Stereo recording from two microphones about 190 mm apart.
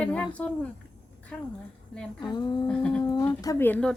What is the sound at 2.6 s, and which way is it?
Speech, 5° left (ahead or behind).